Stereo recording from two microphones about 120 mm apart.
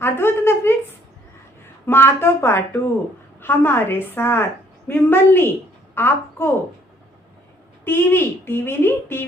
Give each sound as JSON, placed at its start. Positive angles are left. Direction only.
{"t": 0.0, "sound": "a sound", "side_deg": 20}
{"t": 1.9, "sound": "a woman's voice", "side_deg": 20}
{"t": 7.9, "sound": "speech", "side_deg": 20}